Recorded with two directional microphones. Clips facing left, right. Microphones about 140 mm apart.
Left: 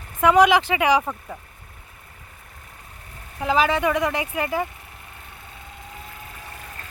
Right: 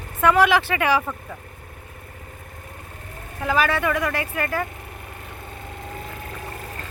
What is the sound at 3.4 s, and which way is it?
Speech, 15° left (ahead or behind).